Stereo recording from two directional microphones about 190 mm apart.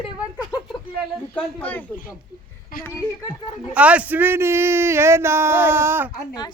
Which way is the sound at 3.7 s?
5° right (ahead or behind).